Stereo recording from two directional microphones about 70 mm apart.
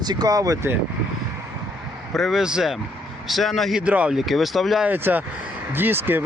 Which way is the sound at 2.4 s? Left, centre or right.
Centre.